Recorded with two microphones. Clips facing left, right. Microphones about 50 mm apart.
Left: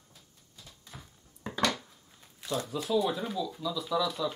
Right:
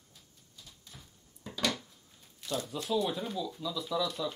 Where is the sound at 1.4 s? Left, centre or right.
Left.